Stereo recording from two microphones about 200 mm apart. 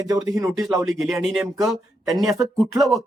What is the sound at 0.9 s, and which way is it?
Speech, centre (ahead or behind).